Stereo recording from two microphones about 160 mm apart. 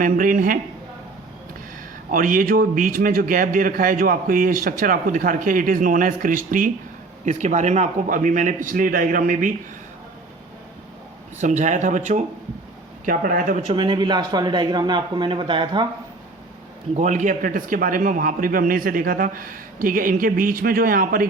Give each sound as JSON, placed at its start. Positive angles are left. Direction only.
{"t": 0.0, "sound": "a man's voice", "side_deg": -60}
{"t": 2.1, "sound": "a man's voice", "side_deg": -55}
{"t": 11.3, "sound": "a man's voice", "side_deg": -50}
{"t": 13.7, "sound": "speech", "side_deg": -30}
{"t": 16.9, "sound": "a man's voice", "side_deg": -50}